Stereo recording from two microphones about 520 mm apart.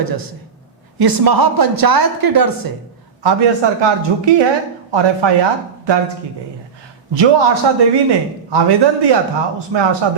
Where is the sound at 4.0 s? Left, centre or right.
Right.